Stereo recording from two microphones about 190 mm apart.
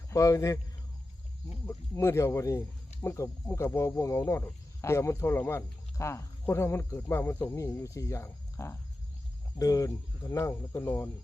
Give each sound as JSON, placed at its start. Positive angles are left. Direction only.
{"t": 0.1, "sound": "speech", "side_deg": 15}
{"t": 1.6, "sound": "speech", "side_deg": 15}